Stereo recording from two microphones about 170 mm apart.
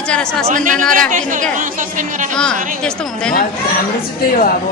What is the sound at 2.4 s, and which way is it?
Speech, 5° left (ahead or behind).